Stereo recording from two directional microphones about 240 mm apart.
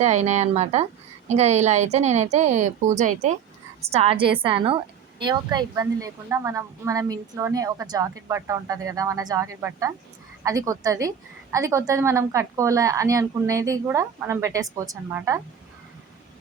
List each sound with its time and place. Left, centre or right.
0.0 s a woman's voice: right; by 15.4 s centre